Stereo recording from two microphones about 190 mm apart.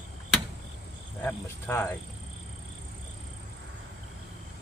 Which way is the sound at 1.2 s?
10° left (ahead or behind).